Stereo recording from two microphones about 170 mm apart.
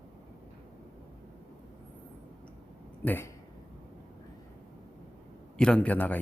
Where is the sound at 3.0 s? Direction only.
10° left (ahead or behind).